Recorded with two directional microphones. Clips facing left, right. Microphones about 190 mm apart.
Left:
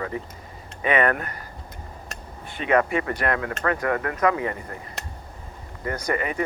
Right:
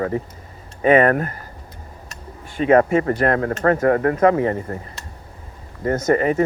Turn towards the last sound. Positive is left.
turn(degrees=-40)  # may be behind; listen again after turning